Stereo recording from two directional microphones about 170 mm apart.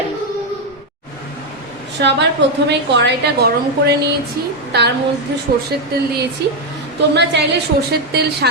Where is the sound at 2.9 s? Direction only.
90° right; by 5.9 s 70° right (ahead or behind).